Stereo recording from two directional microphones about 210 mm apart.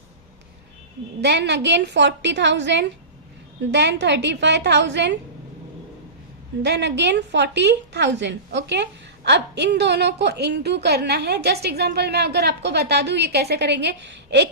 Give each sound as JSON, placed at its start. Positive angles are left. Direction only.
{"t": 1.2, "sound": "a woman's voice", "side_deg": -55}
{"t": 6.6, "sound": "a woman's voice", "side_deg": -55}